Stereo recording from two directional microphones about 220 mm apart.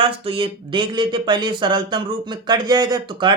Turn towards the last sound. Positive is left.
turn(degrees=-20)  # may be behind; listen again after turning